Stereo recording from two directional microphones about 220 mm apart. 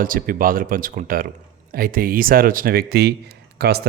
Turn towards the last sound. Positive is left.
turn(degrees=-45)  # may be behind; listen again after turning